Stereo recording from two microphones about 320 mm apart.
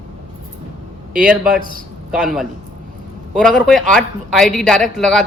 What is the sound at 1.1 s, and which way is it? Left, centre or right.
Speech, right.